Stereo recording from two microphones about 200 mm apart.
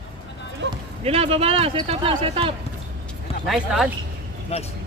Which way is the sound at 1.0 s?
30° right (ahead or behind).